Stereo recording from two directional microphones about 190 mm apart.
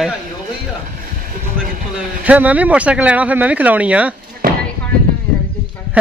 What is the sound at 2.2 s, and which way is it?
Speech, 10° right (ahead or behind).